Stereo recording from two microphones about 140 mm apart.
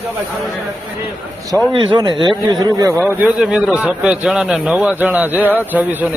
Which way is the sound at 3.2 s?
5° right (ahead or behind).